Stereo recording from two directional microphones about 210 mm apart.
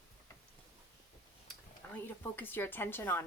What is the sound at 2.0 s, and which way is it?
Speech, 10° left (ahead or behind).